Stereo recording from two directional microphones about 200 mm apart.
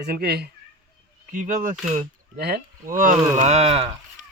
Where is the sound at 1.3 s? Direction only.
40° right (ahead or behind).